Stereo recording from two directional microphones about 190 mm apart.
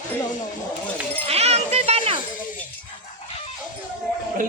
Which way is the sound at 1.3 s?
35° right (ahead or behind).